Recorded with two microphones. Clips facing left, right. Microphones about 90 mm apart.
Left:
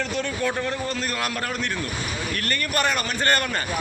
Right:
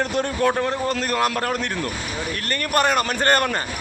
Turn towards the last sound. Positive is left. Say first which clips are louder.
# right 4 dB
turn(degrees=-45)  # may be behind; listen again after turning